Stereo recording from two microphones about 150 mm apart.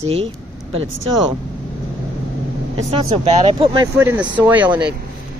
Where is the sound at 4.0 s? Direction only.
15° right (ahead or behind).